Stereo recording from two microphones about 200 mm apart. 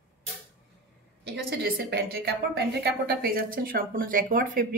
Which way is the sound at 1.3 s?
50° right (ahead or behind).